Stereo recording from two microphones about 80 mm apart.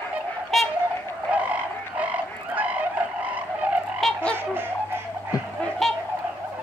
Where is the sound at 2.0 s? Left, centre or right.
Centre.